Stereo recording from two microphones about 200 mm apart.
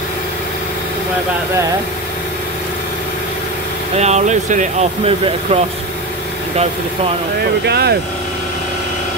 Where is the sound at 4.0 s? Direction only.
35° right (ahead or behind).